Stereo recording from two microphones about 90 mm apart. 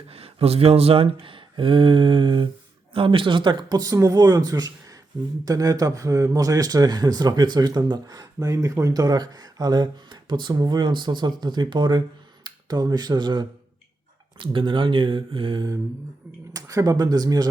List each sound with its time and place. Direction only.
0.1 s speech: 90° right
1.2 s a sound: 75° right (ahead or behind)
2.9 s speech: 80° right; by 4.7 s 45° right (ahead or behind)
5.1 s speech: 55° right (ahead or behind)
5.5 s speech: 40° right (ahead or behind)
14.3 s a sound: 70° right (ahead or behind)
16.5 s speech: 40° right (ahead or behind)